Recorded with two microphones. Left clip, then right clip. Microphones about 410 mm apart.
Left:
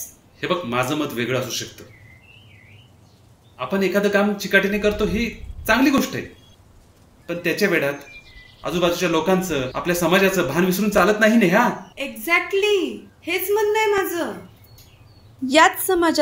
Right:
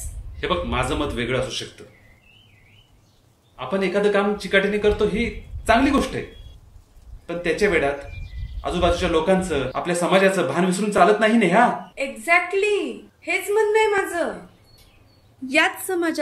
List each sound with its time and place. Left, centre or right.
0.4 s speech: centre
3.5 s a man's voice: centre
7.2 s a man's voice: centre
15.4 s speech: centre